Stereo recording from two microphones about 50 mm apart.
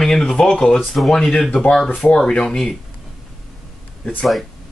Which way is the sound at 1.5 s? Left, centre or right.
Left.